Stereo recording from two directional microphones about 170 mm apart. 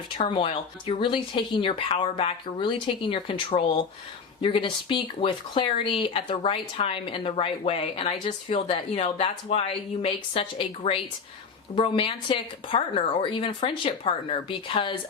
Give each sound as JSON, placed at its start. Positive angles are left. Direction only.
{"t": 0.3, "sound": "speech", "side_deg": 30}